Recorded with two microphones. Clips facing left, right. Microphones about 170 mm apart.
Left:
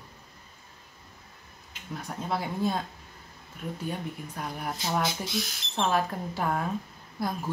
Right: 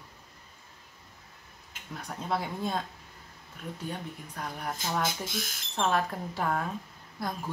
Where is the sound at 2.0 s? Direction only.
Centre (ahead or behind).